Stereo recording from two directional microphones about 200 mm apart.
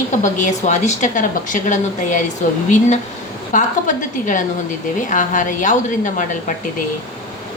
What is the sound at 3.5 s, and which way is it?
A woman's voice, 40° left (ahead or behind).